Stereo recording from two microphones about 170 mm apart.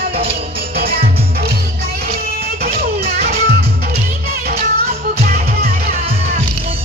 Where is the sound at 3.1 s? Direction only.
65° right (ahead or behind).